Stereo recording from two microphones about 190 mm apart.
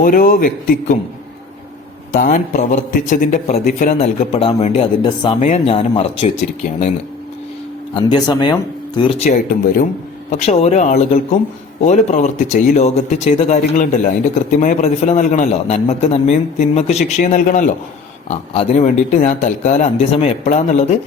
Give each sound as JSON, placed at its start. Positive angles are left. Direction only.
{"t": 0.0, "sound": "a man's voice", "side_deg": 45}
{"t": 2.1, "sound": "a man's voice", "side_deg": 45}
{"t": 7.9, "sound": "a man's voice", "side_deg": 25}